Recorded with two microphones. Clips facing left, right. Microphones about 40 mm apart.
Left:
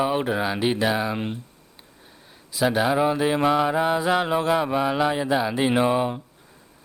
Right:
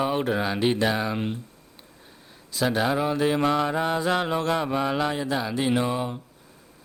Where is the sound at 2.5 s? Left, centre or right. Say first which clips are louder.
Left 3 dB; centre.